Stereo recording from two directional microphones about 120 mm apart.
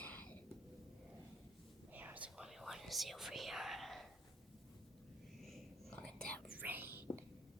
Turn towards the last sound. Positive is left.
turn(degrees=-15)  # may be behind; listen again after turning